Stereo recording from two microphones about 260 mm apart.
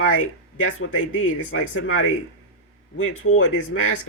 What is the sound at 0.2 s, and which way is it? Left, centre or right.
Speech, left.